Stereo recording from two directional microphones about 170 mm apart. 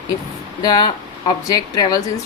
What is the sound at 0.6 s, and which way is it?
Speech, 25° left (ahead or behind).